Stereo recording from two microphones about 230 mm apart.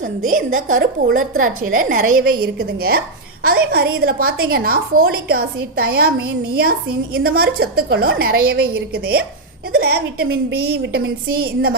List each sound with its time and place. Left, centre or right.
0.3 s a woman's voice: right